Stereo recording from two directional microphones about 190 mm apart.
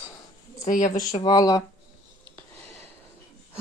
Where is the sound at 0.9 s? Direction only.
40° left (ahead or behind).